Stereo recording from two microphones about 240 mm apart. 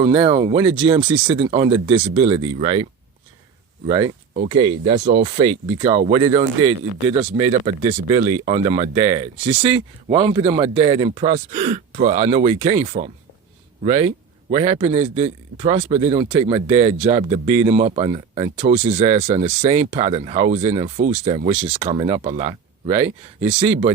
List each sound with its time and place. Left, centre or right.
0.0 s speech: centre
3.8 s speech: centre